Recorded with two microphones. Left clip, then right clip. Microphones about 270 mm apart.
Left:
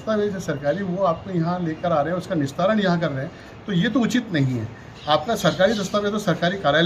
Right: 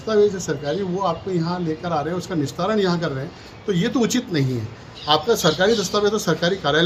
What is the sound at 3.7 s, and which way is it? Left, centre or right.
Speech, centre.